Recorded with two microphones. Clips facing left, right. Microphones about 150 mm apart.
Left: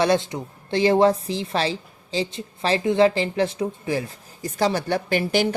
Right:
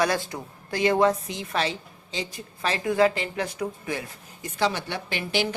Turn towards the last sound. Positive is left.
turn(degrees=45)  # may be behind; listen again after turning